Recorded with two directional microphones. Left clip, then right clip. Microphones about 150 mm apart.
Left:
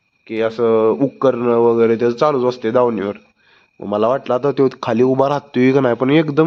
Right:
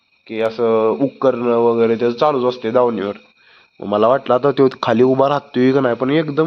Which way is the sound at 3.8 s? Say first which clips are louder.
Right 2 dB; 10° left (ahead or behind).